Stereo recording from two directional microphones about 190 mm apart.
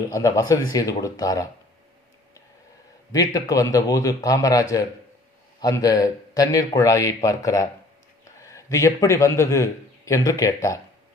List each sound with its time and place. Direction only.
0.1 s a man's voice: 15° left (ahead or behind)
3.1 s a man's voice: 20° left (ahead or behind)